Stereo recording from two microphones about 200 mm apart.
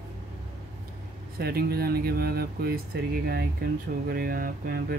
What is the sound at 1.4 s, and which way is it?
Speech, 50° right (ahead or behind).